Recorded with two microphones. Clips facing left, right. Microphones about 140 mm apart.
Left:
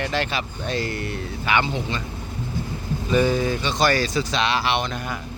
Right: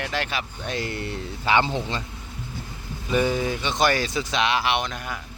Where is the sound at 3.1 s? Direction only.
15° right (ahead or behind).